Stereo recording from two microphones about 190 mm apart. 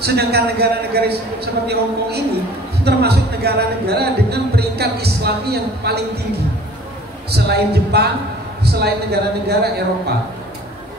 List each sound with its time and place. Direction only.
0.0 s speech: 60° right (ahead or behind)
7.2 s speech: 55° right (ahead or behind)